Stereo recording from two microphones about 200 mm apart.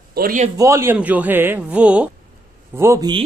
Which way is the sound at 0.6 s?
15° right (ahead or behind).